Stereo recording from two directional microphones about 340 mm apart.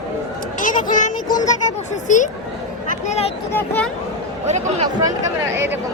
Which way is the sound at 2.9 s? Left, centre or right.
Centre.